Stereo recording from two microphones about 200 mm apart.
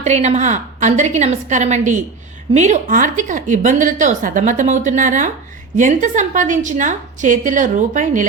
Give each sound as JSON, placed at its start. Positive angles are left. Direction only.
{"t": 0.0, "sound": "a woman's voice", "side_deg": -35}